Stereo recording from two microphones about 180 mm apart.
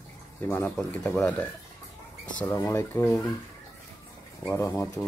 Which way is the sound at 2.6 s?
20° left (ahead or behind).